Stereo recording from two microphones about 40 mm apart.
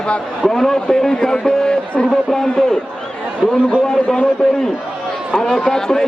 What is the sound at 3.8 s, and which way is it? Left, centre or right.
A man's voice, centre.